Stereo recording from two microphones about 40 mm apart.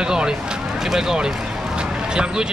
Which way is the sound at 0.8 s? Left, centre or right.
Centre.